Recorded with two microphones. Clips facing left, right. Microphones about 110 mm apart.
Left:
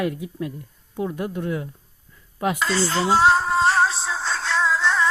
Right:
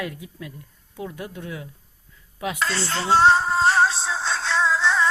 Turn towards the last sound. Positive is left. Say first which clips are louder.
# even
turn(degrees=0)  # may be behind; listen again after turning